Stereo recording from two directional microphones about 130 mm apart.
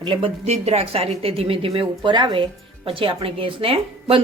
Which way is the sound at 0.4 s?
55° right (ahead or behind).